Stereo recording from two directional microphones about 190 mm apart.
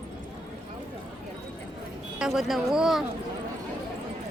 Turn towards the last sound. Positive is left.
turn(degrees=0)  # may be behind; listen again after turning